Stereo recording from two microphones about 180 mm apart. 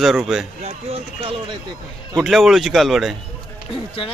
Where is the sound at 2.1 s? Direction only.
Centre (ahead or behind).